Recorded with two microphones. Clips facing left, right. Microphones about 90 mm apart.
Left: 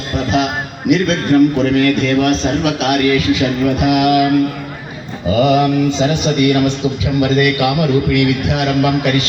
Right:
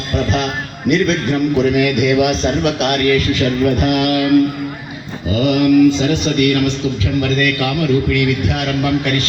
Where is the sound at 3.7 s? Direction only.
15° left (ahead or behind).